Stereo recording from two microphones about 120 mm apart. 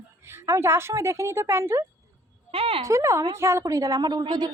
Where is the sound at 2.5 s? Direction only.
55° right (ahead or behind).